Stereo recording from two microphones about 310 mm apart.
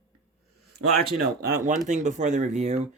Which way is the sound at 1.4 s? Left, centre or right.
Right.